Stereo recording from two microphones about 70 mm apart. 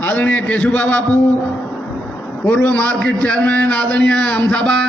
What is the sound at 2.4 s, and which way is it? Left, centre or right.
A man's voice, centre.